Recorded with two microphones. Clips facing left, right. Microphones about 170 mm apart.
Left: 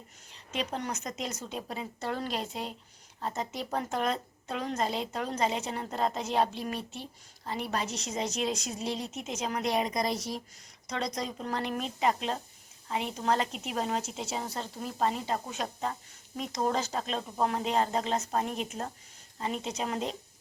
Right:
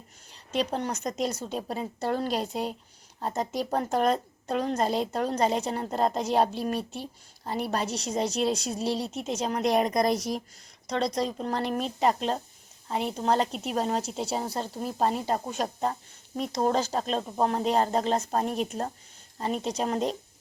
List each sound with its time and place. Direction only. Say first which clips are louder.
0.5 s a woman's voice: right 5 dB; 35° right (ahead or behind); by 10.2 s 50° right (ahead or behind)
10.8 s a woman's voice: right 6 dB; 30° right (ahead or behind)